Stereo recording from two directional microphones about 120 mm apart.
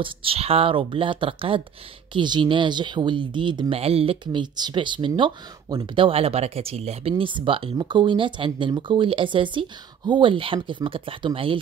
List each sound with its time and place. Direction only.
0.0 s speech: 50° right (ahead or behind)
3.8 s speech: 55° right (ahead or behind)